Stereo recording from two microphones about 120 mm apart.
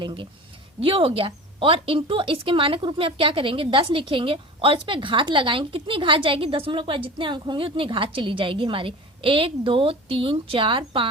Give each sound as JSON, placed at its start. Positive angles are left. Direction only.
{"t": 0.0, "sound": "a woman's voice", "side_deg": -45}